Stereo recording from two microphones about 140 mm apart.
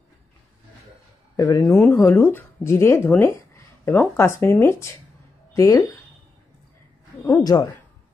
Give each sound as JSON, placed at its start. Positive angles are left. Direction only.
{"t": 1.3, "sound": "speech", "side_deg": 25}
{"t": 7.2, "sound": "speech", "side_deg": 20}